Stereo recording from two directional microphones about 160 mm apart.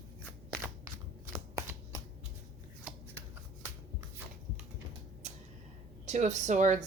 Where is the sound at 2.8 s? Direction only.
15° right (ahead or behind).